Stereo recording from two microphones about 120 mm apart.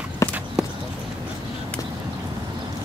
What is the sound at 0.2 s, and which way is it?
Run, 25° left (ahead or behind).